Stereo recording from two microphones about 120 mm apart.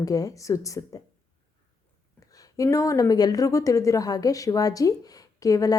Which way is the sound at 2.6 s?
25° left (ahead or behind).